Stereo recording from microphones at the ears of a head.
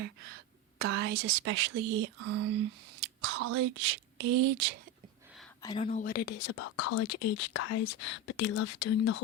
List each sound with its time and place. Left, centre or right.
0.0 s a woman's voice: right
6.0 s speech: left